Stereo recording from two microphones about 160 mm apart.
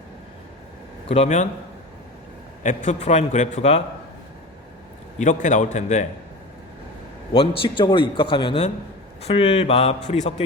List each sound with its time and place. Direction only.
1.0 s a man's voice: 40° left (ahead or behind)
2.6 s a man's voice: 45° left (ahead or behind)
5.2 s a man's voice: 50° left (ahead or behind)
7.3 s a man's voice: 30° left (ahead or behind)